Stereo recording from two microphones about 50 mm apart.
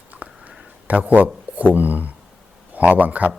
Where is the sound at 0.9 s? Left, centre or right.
Right.